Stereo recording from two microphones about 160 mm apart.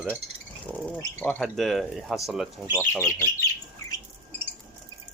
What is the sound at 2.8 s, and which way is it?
Speech, 15° left (ahead or behind).